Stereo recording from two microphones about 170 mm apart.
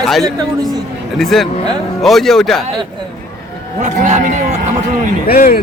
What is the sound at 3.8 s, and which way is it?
Speech, 45° right (ahead or behind).